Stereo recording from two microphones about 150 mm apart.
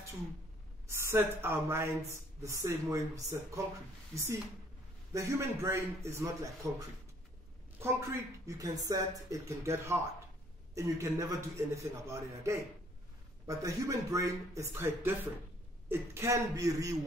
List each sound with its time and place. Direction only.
0.8 s speech: 15° right (ahead or behind)